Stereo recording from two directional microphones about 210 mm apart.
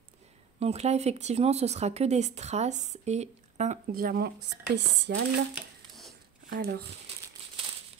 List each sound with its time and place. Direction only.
0.6 s speech: 30° right (ahead or behind)
4.4 s speech: 55° right (ahead or behind)
5.5 s a sound: centre (ahead or behind)
6.5 s speech: 50° right (ahead or behind)